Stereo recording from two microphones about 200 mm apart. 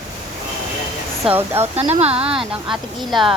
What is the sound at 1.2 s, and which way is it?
Speech, 10° right (ahead or behind).